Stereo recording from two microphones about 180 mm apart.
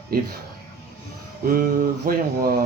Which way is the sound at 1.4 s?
55° right (ahead or behind).